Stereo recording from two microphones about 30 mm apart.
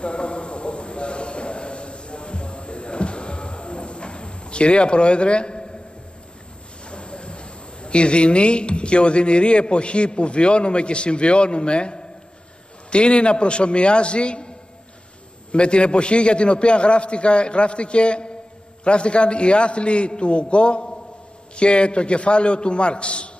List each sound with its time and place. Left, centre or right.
0.0 s a sound: left
6.9 s a man's voice: left
15.5 s a man's voice: left